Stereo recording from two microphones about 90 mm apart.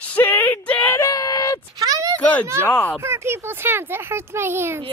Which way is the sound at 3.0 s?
25° right (ahead or behind).